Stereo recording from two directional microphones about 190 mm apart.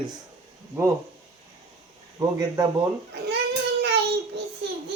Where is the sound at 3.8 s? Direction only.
60° right (ahead or behind).